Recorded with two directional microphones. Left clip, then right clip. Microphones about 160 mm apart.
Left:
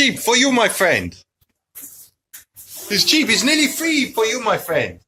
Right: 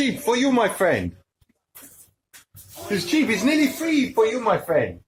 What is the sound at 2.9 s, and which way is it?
Speech, centre (ahead or behind).